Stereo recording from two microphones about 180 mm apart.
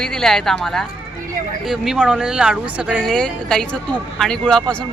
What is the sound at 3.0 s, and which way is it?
Speech, 5° left (ahead or behind).